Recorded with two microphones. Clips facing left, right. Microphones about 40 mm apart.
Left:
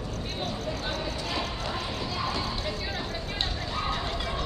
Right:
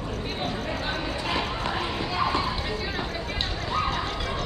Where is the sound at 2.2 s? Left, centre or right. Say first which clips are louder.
Right 7 dB; right.